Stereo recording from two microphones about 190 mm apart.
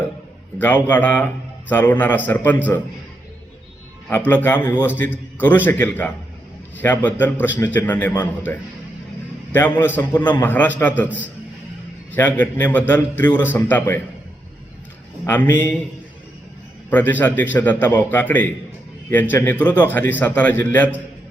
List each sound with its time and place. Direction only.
0.9 s a man's voice: 10° left (ahead or behind)
4.1 s a man's voice: 10° left (ahead or behind)
9.5 s a man's voice: 10° left (ahead or behind)
15.3 s a man's voice: 10° left (ahead or behind)
16.9 s a man's voice: 10° left (ahead or behind)